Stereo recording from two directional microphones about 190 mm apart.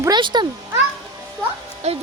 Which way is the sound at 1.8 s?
35° right (ahead or behind).